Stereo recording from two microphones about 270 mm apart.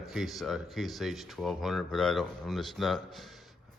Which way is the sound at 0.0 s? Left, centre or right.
Centre.